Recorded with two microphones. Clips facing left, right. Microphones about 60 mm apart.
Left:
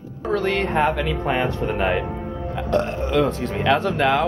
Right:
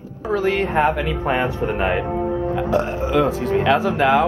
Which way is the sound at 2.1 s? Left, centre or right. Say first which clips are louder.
Right 7 dB; right.